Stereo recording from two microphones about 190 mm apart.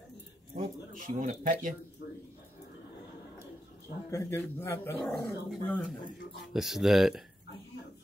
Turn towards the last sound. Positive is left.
turn(degrees=0)  # may be behind; listen again after turning